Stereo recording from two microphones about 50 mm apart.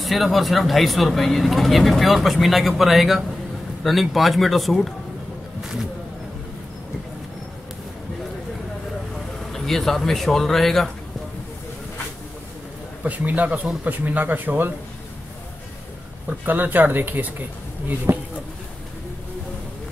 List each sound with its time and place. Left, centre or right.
0.0 s speech: centre
9.5 s speech: centre
13.0 s speech: right
16.4 s speech: right
18.1 s speech: right